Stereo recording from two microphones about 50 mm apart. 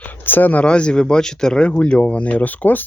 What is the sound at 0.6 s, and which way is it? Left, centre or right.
Speech, left.